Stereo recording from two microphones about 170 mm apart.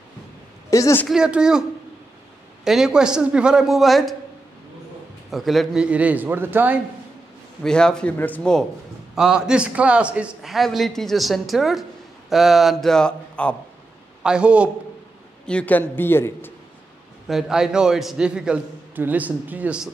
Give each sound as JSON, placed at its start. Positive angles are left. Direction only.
{"t": 0.7, "sound": "a woman's voice", "side_deg": 20}
{"t": 1.0, "sound": "a man's voice", "side_deg": -5}
{"t": 5.3, "sound": "a man's voice", "side_deg": 0}
{"t": 7.6, "sound": "a man's voice", "side_deg": 5}
{"t": 9.1, "sound": "a man's voice", "side_deg": -5}
{"t": 14.2, "sound": "a man's voice", "side_deg": -5}
{"t": 15.4, "sound": "a man's voice", "side_deg": 10}
{"t": 17.3, "sound": "a man's voice", "side_deg": -5}